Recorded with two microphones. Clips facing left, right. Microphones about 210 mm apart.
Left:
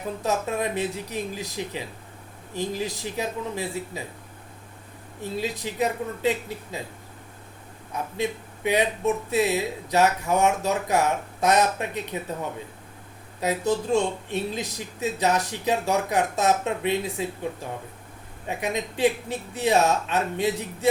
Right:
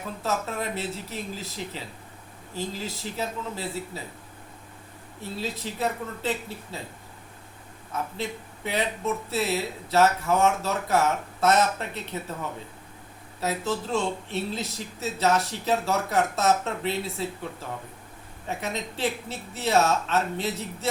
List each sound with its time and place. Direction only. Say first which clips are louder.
0.2 s speech: left 3 dB; 15° left (ahead or behind)
5.4 s speech: left 3 dB; 15° left (ahead or behind)
7.9 s speech: left 3 dB; 15° left (ahead or behind)
13.4 s speech: left 4 dB; 15° left (ahead or behind)
18.4 s speech: left 3 dB; 15° left (ahead or behind)